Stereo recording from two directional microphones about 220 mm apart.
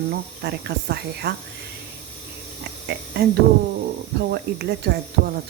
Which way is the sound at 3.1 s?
45° right (ahead or behind).